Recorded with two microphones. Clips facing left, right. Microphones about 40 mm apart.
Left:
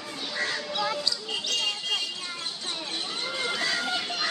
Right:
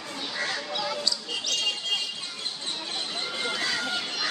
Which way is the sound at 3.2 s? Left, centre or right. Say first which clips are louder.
Left 1 dB; centre.